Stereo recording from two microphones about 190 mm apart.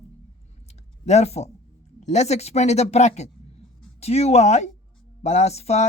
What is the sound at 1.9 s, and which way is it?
Speech, 35° left (ahead or behind).